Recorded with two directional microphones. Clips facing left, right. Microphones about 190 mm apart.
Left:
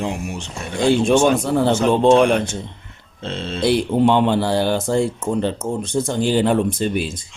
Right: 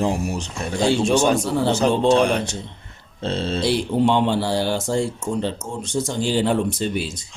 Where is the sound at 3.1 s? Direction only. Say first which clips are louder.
Right 3 dB; 40° right (ahead or behind).